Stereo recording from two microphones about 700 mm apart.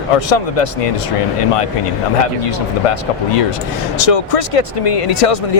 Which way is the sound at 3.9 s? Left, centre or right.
Left.